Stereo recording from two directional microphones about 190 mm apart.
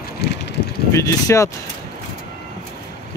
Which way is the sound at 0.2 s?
55° left (ahead or behind).